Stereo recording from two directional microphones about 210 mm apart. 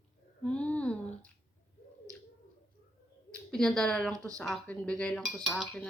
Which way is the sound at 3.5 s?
5° left (ahead or behind).